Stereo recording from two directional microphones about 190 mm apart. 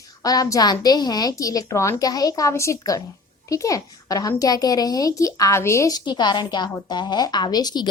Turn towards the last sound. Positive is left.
turn(degrees=20)  # may be behind; listen again after turning